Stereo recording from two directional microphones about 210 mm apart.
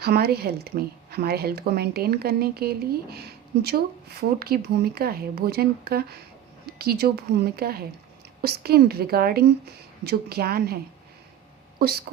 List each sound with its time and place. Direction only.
0.0 s speech: 50° right (ahead or behind)
11.8 s speech: 50° right (ahead or behind)